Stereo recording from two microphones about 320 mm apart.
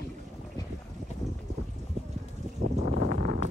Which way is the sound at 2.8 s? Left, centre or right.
Right.